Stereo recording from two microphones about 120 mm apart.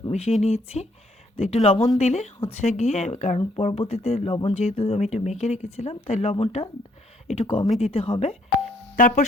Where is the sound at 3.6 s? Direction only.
60° left (ahead or behind).